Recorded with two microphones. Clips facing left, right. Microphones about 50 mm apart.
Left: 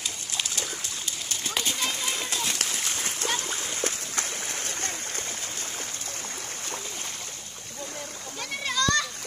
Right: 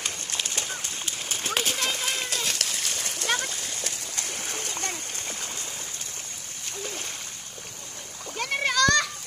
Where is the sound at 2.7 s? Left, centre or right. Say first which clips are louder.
Left 1 dB; left.